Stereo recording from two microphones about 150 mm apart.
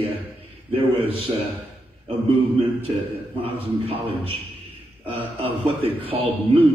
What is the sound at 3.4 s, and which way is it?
Speech, 40° right (ahead or behind).